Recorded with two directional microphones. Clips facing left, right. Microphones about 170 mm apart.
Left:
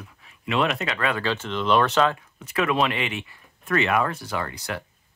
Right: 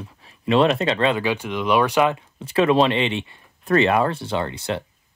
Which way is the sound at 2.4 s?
30° right (ahead or behind).